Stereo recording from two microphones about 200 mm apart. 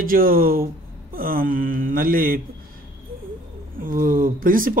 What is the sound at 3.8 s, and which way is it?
Speech, 45° right (ahead or behind).